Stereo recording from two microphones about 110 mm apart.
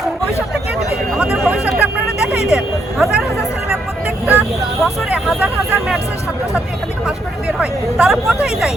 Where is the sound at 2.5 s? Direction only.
Centre (ahead or behind).